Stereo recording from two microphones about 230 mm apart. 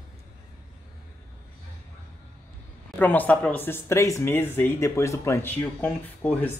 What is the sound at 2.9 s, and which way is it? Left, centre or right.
Speech, centre.